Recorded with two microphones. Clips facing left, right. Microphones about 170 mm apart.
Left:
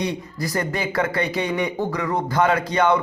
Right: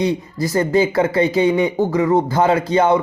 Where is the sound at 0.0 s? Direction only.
25° right (ahead or behind).